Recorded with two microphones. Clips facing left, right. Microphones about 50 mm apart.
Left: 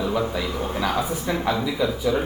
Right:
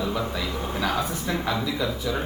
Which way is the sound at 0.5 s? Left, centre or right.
Left.